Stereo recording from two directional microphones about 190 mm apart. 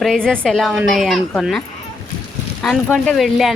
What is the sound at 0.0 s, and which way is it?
Speech, 5° left (ahead or behind).